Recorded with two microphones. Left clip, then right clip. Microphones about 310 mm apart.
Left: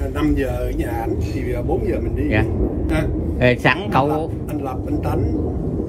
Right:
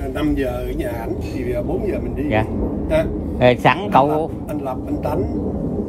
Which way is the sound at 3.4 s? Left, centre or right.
Centre.